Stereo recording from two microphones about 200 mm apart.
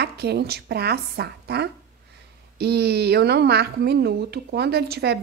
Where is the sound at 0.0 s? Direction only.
55° right (ahead or behind).